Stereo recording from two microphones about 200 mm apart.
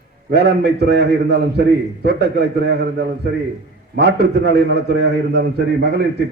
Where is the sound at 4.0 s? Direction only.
60° right (ahead or behind).